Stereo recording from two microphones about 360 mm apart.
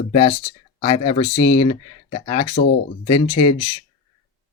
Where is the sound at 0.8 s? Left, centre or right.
Centre.